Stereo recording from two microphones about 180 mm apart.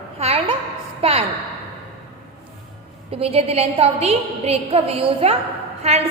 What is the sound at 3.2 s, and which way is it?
A woman's voice, 30° right (ahead or behind).